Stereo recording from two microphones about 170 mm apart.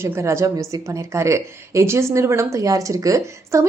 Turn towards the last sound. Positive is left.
turn(degrees=-20)  # may be behind; listen again after turning